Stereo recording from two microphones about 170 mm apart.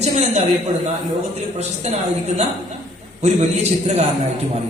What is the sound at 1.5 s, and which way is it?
A woman's voice, 40° right (ahead or behind).